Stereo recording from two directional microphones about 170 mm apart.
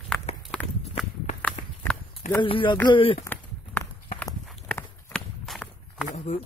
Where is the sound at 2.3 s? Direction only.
30° left (ahead or behind).